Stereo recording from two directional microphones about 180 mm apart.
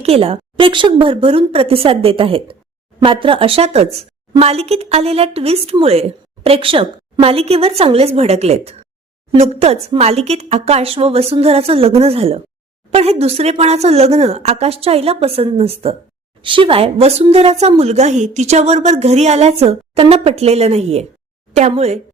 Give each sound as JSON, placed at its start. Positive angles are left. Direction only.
{"t": 0.0, "sound": "speech", "side_deg": -30}